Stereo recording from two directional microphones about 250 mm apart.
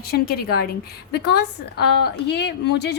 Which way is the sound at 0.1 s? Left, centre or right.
Left.